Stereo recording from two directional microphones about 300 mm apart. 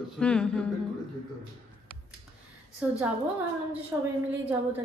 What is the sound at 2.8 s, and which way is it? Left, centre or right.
Speech, centre.